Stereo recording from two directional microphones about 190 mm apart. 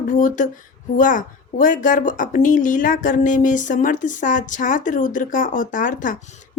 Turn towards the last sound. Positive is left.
turn(degrees=45)  # may be behind; listen again after turning